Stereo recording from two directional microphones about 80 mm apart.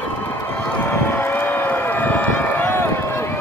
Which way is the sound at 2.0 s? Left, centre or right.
Left.